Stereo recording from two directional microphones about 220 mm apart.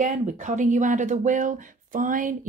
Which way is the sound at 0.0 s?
35° right (ahead or behind).